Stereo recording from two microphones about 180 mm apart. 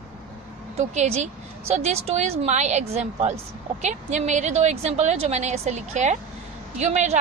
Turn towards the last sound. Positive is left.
turn(degrees=-40)  # may be behind; listen again after turning